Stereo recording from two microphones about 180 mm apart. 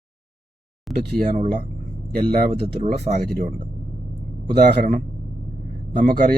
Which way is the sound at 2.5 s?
40° right (ahead or behind).